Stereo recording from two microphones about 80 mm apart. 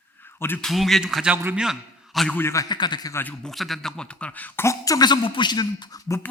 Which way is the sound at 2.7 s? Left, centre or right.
Left.